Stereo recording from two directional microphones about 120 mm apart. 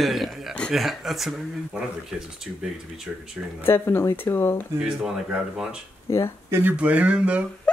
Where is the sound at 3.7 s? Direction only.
20° left (ahead or behind).